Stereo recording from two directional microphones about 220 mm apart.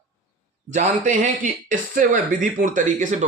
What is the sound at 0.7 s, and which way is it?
A man's voice, 35° right (ahead or behind).